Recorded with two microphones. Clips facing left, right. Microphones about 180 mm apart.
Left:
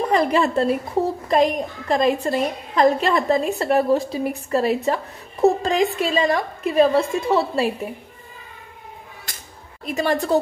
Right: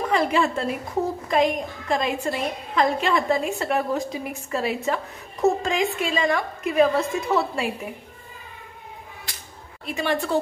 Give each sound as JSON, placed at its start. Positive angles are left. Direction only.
{"t": 0.1, "sound": "a woman's voice", "side_deg": 40}
{"t": 9.8, "sound": "a woman's voice", "side_deg": 40}